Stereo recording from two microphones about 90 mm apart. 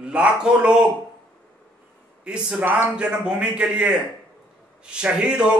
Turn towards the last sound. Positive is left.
turn(degrees=-10)  # may be behind; listen again after turning